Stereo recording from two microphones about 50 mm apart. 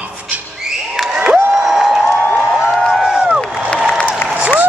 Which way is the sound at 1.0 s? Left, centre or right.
Centre.